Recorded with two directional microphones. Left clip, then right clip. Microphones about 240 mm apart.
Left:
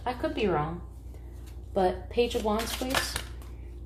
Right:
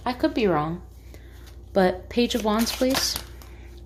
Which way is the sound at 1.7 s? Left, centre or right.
Right.